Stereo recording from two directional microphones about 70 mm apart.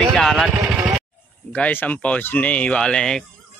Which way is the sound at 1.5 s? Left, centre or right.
Centre.